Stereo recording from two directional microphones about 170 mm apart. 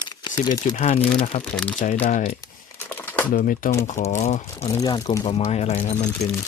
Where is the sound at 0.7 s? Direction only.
45° left (ahead or behind).